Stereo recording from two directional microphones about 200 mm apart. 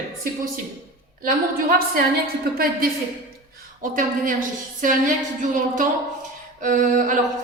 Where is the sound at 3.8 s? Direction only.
40° right (ahead or behind).